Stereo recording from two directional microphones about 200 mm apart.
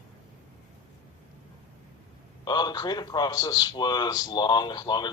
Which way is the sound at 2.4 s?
20° left (ahead or behind).